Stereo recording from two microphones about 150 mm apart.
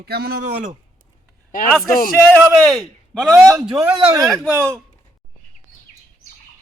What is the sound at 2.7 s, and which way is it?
Speech, centre (ahead or behind).